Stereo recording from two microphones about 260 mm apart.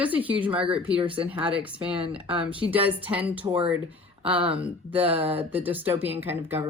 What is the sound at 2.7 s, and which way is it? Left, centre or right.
Speech, centre.